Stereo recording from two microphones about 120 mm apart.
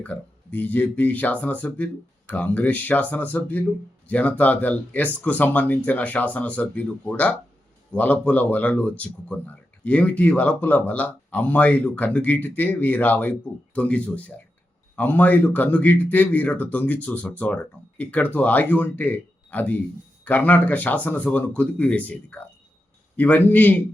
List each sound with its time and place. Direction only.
0.0 s speech: 15° left (ahead or behind)